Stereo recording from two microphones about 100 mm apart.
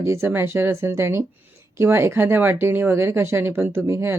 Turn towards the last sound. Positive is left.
turn(degrees=-25)  # may be behind; listen again after turning